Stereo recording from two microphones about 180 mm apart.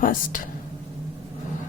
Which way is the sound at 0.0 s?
50° left (ahead or behind).